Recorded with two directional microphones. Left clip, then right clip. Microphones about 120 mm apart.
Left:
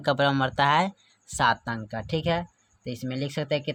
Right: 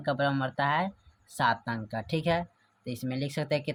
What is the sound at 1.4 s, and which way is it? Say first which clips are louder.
Speech: left 4 dB; 45° left (ahead or behind).